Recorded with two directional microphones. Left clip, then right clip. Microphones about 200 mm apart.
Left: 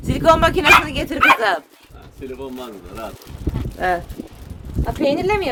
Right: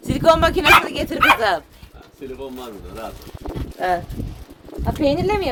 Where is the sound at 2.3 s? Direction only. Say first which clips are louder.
Left 1 dB; 55° left (ahead or behind).